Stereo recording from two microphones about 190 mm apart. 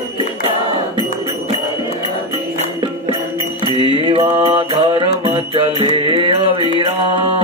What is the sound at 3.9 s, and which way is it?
Music, 30° right (ahead or behind).